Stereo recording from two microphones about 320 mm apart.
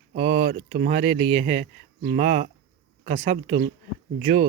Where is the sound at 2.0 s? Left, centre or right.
Right.